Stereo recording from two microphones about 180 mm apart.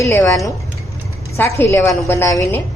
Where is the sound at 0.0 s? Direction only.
15° left (ahead or behind).